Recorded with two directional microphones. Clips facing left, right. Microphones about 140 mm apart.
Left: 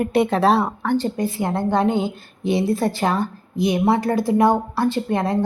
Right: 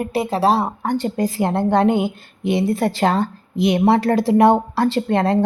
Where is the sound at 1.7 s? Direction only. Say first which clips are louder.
Right 3 dB; 75° right (ahead or behind).